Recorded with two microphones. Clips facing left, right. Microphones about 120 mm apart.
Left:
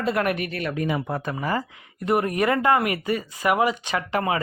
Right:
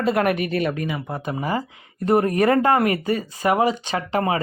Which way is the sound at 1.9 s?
35° right (ahead or behind).